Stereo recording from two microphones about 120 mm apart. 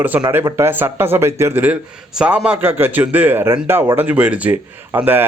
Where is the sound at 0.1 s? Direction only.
15° right (ahead or behind).